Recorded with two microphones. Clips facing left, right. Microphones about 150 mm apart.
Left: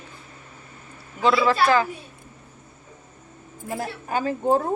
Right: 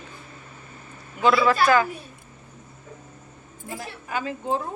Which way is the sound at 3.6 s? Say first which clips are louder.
Left 6 dB; 50° left (ahead or behind).